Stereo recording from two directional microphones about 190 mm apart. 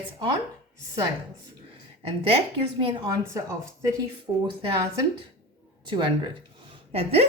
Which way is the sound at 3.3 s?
15° right (ahead or behind).